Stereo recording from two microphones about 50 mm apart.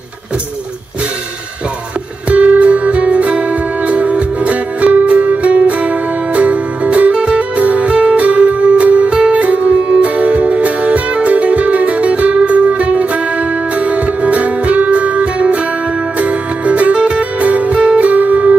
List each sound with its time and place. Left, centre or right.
2.2 s music: right